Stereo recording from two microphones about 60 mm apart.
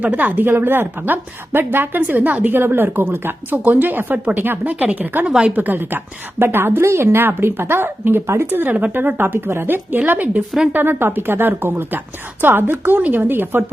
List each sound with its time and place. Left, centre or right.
0.0 s a woman's voice: right
5.2 s a woman's voice: centre
5.5 s a woman's voice: right